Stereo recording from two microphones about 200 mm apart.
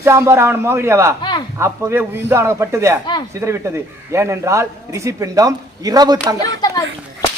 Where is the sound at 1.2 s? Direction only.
20° left (ahead or behind).